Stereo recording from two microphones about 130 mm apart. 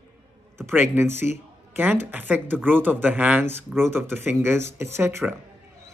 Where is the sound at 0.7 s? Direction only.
20° right (ahead or behind).